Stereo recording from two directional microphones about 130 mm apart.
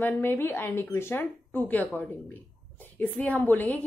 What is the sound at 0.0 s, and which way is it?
A woman's voice, 15° left (ahead or behind).